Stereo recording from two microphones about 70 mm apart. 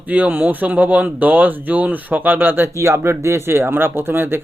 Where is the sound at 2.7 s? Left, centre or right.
Right.